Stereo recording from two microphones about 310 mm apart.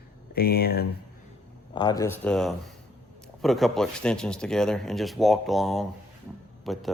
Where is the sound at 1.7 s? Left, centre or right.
Centre.